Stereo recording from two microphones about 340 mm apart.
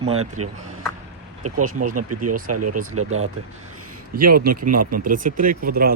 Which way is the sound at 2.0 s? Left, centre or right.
Right.